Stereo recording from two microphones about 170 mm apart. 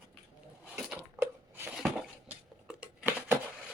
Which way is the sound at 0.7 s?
5° right (ahead or behind).